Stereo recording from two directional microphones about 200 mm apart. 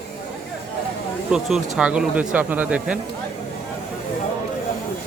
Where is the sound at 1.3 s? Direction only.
5° right (ahead or behind).